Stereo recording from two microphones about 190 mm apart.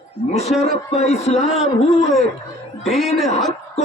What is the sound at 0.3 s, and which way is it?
A man's voice, 35° left (ahead or behind).